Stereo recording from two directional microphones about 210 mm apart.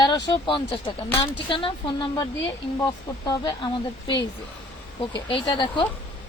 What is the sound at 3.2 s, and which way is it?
A woman's voice, 20° left (ahead or behind).